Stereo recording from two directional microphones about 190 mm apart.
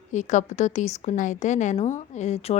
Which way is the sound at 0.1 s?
40° left (ahead or behind).